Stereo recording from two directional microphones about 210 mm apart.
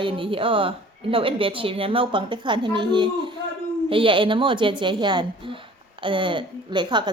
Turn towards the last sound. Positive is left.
turn(degrees=-20)  # may be behind; listen again after turning